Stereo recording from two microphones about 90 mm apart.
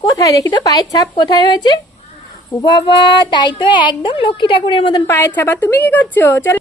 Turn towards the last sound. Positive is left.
turn(degrees=25)  # may be behind; listen again after turning